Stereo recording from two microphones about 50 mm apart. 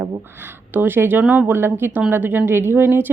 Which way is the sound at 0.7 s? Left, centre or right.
Right.